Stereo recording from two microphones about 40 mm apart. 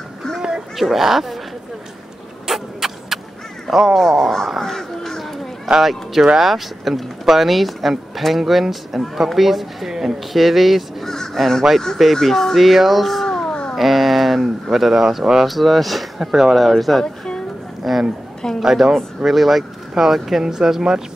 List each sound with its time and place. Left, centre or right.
0.7 s speech: centre
2.4 s vehicle: centre
3.7 s speech: centre
4.6 s crow: centre
5.7 s speech: centre
11.1 s crow: centre
12.0 s speech: centre
13.2 s a sound: centre
13.7 s speech: centre
16.5 s speech: centre